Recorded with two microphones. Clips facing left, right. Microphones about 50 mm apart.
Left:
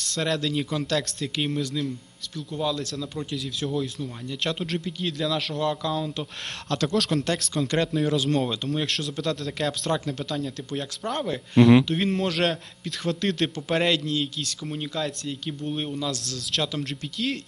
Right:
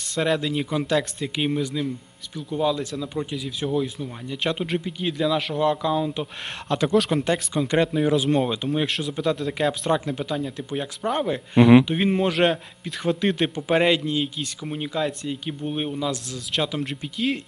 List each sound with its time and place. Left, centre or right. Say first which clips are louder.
0.0 s a man's voice: right 3 dB; centre